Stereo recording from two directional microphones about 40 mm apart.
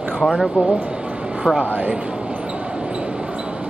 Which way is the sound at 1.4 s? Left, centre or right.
Centre.